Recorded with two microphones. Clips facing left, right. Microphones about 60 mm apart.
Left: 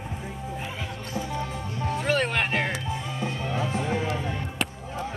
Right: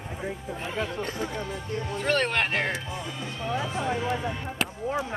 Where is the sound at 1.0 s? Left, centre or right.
Right.